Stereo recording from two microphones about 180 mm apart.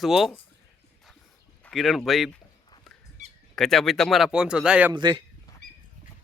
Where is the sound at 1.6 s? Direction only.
Centre (ahead or behind).